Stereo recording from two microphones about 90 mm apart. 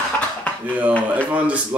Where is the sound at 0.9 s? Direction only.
15° left (ahead or behind).